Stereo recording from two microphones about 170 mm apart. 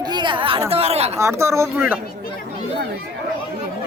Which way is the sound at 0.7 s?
35° right (ahead or behind).